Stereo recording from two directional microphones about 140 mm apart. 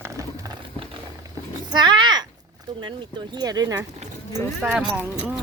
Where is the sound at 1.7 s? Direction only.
30° right (ahead or behind).